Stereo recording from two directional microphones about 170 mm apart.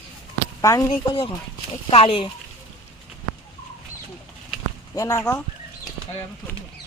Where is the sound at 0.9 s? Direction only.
30° left (ahead or behind).